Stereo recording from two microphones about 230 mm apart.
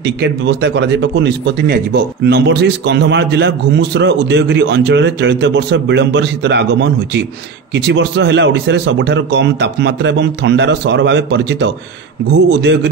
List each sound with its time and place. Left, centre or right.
0.0 s speech: right